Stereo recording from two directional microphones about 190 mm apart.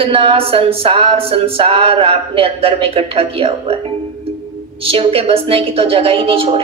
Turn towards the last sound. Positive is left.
turn(degrees=-30)  # may be behind; listen again after turning